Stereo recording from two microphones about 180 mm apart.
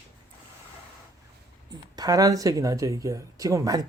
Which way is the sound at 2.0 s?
20° right (ahead or behind).